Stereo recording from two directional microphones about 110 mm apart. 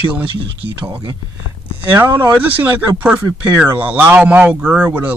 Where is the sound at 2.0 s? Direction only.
15° right (ahead or behind).